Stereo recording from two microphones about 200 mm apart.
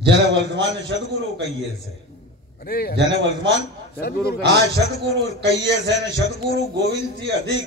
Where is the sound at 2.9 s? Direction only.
65° right (ahead or behind).